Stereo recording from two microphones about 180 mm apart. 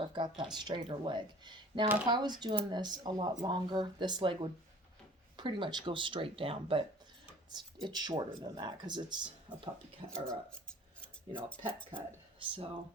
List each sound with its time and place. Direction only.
0.0 s speech: 25° right (ahead or behind)
11.0 s cutlery: 5° left (ahead or behind)
11.9 s speech: 30° right (ahead or behind)